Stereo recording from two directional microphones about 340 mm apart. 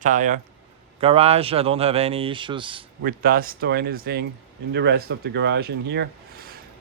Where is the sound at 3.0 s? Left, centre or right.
Right.